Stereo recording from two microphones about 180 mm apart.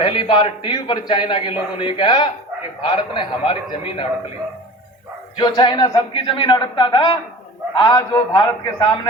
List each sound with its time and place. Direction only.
0.0 s a man's voice: 25° left (ahead or behind)
5.4 s a man's voice: 25° left (ahead or behind)